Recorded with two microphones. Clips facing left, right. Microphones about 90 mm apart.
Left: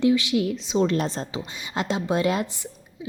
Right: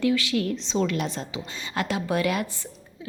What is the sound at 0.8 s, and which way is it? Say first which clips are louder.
Speech: left 4 dB; 35° left (ahead or behind).